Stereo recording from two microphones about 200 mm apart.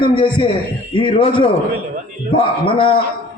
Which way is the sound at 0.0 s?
25° left (ahead or behind).